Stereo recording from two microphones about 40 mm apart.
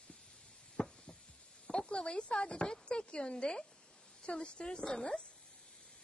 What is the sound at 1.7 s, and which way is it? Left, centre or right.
A woman's voice, left.